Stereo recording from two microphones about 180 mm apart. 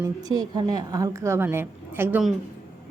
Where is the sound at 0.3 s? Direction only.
25° right (ahead or behind).